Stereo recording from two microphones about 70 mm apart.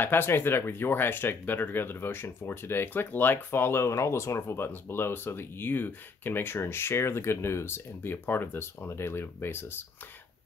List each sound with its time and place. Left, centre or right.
0.0 s speech: left